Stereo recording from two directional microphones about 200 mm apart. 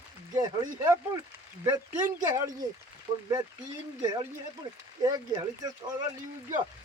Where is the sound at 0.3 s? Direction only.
20° right (ahead or behind).